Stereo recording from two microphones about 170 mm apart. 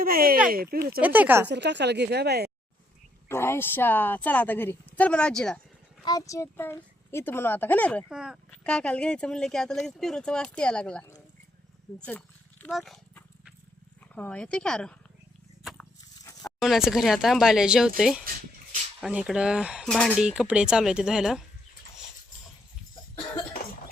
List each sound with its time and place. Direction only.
0.0 s speech: 60° right (ahead or behind)
1.0 s speech: 10° right (ahead or behind)
1.5 s speech: 90° right; by 2.5 s 70° right (ahead or behind)
3.2 s a woman's voice: 15° left (ahead or behind)
6.1 s a woman's voice: 20° left (ahead or behind)
8.1 s a woman's voice: 5° right (ahead or behind)
12.6 s dog: centre (ahead or behind)
14.2 s a woman's voice: 5° left (ahead or behind)
16.6 s speech: centre (ahead or behind)
20.2 s speech: 5° right (ahead or behind)